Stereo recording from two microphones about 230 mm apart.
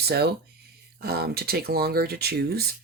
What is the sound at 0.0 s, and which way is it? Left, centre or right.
Speech, right.